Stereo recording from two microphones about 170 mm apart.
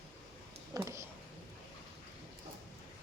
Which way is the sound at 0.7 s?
15° right (ahead or behind).